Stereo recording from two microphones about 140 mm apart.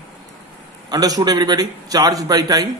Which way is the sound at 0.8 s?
30° right (ahead or behind).